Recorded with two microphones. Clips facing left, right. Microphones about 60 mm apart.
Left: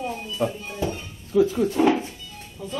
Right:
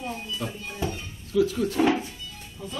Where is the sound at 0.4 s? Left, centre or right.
Left.